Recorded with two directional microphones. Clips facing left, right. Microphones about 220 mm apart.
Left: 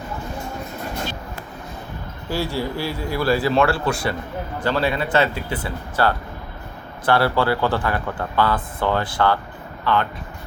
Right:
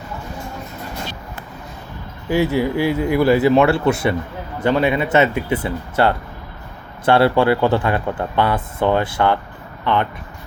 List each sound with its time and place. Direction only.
2.3 s speech: 20° right (ahead or behind)